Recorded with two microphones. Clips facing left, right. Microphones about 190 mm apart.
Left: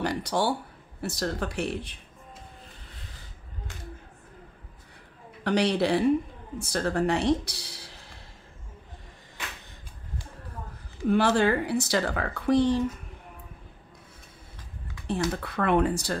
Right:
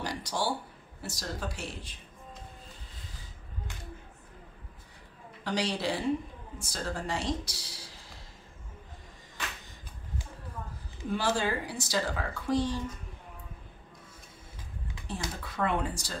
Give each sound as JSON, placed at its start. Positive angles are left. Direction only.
{"t": 0.0, "sound": "a sound", "side_deg": 60}
{"t": 1.0, "sound": "speech", "side_deg": 60}
{"t": 5.4, "sound": "speech", "side_deg": 60}
{"t": 11.1, "sound": "speech", "side_deg": 60}
{"t": 15.0, "sound": "speech", "side_deg": 65}